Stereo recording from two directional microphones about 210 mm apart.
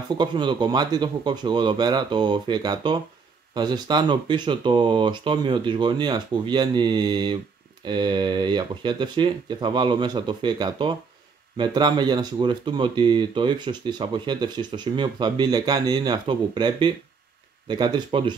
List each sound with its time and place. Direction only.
0.2 s speech: 20° right (ahead or behind)